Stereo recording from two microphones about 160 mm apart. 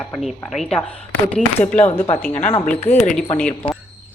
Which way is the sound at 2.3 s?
50° left (ahead or behind).